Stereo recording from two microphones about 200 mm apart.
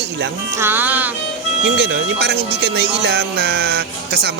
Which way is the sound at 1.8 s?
55° right (ahead or behind).